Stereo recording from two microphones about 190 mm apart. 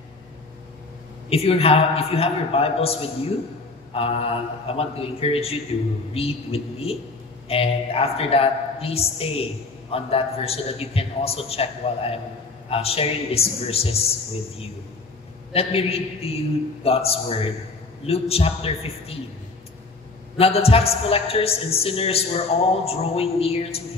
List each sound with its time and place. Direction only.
1.3 s a man's voice: 30° left (ahead or behind)
15.5 s a man's voice: 30° left (ahead or behind)
20.3 s a man's voice: 30° left (ahead or behind)